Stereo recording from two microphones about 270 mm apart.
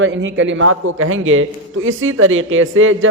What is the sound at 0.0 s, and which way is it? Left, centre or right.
A man's voice, right.